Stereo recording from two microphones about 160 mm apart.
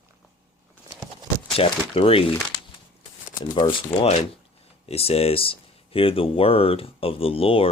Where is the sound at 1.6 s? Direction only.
35° left (ahead or behind).